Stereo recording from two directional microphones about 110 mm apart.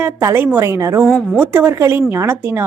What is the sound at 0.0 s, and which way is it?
A woman's voice, 20° right (ahead or behind).